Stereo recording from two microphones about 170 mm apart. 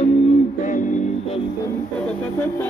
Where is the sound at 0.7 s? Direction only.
50° left (ahead or behind).